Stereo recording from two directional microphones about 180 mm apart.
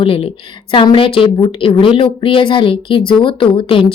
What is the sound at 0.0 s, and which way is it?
A woman's voice, 30° left (ahead or behind).